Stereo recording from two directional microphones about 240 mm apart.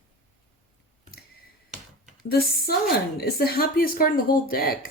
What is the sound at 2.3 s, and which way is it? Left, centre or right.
Speech, left.